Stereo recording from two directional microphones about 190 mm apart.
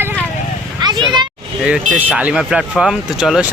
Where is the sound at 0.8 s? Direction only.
20° right (ahead or behind).